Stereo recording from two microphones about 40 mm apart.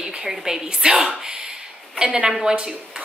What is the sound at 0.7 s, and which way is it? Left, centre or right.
A woman's voice, right.